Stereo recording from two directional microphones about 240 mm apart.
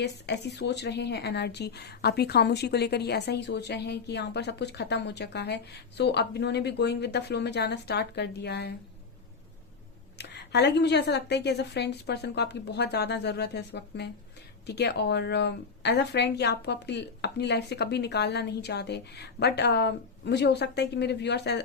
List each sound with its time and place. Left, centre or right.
0.0 s speech: left
10.2 s speech: left